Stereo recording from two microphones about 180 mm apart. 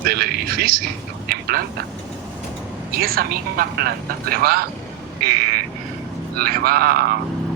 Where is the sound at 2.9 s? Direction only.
55° right (ahead or behind).